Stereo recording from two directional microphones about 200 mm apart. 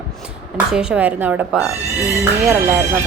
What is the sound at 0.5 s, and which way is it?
A woman's voice, 5° right (ahead or behind).